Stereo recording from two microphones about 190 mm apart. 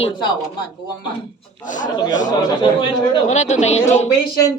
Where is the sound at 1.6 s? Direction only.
40° left (ahead or behind).